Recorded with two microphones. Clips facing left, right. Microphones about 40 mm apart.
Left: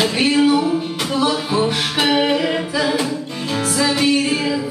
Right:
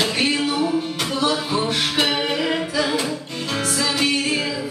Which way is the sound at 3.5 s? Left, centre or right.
Centre.